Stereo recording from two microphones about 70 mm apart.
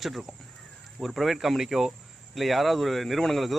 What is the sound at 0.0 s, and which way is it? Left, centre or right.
Speech, centre.